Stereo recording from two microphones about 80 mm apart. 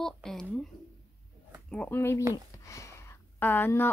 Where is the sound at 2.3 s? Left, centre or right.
Left.